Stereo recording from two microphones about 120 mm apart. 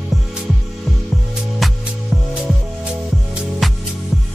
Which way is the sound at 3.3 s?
Centre (ahead or behind).